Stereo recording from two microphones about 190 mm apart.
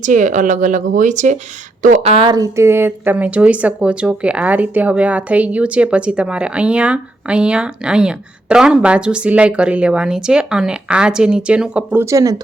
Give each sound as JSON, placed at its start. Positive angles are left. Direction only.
{"t": 0.0, "sound": "a woman's voice", "side_deg": -40}